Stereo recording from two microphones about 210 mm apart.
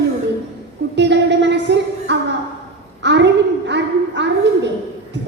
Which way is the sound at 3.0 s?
55° right (ahead or behind).